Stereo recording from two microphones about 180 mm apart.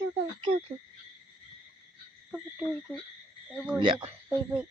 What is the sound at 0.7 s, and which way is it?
Speech, 20° right (ahead or behind).